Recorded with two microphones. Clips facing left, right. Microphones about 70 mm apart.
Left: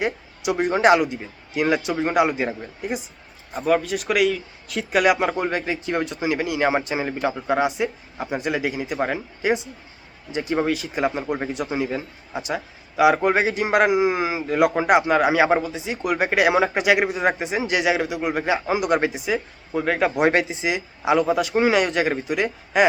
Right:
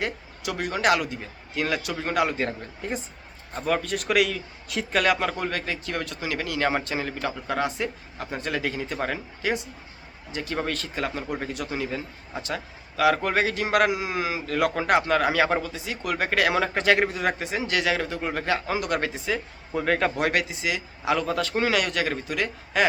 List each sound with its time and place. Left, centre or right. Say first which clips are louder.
0.0 s speech: left 5 dB; left; by 4.9 s centre
4.9 s speech: left 5 dB; centre
20.1 s speech: left 6 dB; left